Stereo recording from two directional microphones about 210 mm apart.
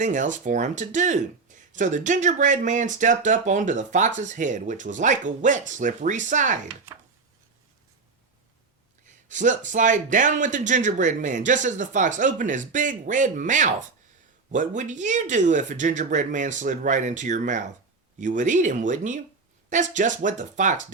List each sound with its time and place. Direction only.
0.0 s speech: 35° right (ahead or behind)
9.0 s speech: 35° right (ahead or behind)